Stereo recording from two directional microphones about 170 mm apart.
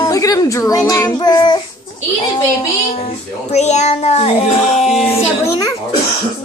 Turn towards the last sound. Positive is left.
turn(degrees=15)  # may be behind; listen again after turning